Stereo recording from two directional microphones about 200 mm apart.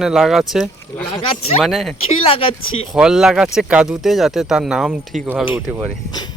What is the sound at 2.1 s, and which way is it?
Speech, 30° left (ahead or behind).